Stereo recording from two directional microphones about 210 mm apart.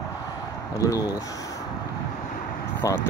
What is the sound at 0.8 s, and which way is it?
Speech, 15° left (ahead or behind).